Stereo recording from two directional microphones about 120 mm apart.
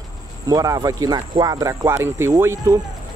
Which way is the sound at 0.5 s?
30° right (ahead or behind).